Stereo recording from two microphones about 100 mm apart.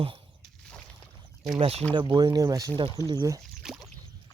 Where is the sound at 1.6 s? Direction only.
80° right.